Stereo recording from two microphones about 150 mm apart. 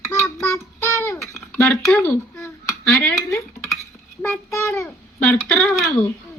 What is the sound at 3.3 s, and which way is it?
Dishes, 20° left (ahead or behind).